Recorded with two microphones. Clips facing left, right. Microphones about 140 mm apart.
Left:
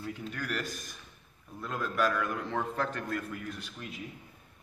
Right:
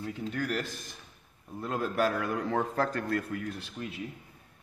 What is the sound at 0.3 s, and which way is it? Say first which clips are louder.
A man's voice: right 5 dB; 30° right (ahead or behind).